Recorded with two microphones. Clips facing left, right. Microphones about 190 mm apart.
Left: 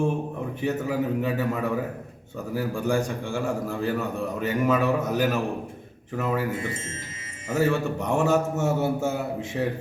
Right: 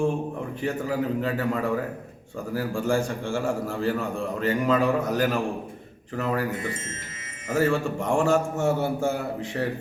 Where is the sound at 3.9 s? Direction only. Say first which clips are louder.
Even; 5° left (ahead or behind).